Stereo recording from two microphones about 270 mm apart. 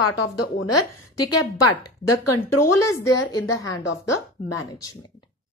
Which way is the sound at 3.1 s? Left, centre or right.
Centre.